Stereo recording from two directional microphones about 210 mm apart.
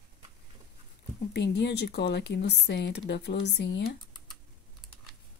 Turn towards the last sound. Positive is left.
turn(degrees=55)  # may be behind; listen again after turning